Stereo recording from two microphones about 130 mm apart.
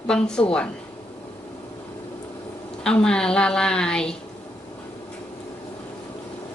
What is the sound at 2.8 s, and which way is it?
A woman's voice, 5° left (ahead or behind).